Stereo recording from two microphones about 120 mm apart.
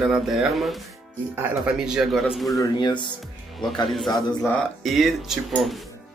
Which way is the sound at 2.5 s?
40° left (ahead or behind).